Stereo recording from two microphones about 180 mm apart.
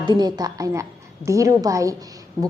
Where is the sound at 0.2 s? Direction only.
20° right (ahead or behind).